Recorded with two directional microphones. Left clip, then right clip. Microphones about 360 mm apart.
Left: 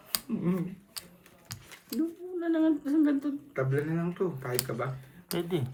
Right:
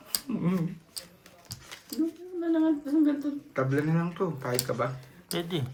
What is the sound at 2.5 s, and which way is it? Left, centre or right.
Humming, left.